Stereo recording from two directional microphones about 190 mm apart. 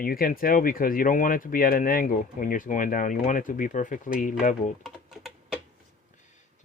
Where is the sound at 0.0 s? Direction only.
50° left (ahead or behind).